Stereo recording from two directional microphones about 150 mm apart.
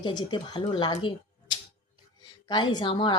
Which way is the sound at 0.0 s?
30° left (ahead or behind).